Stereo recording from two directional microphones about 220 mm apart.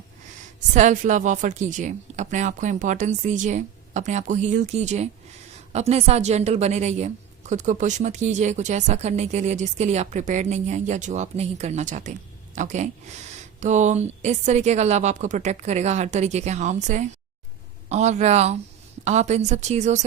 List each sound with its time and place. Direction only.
0.7 s a woman's voice: 35° right (ahead or behind)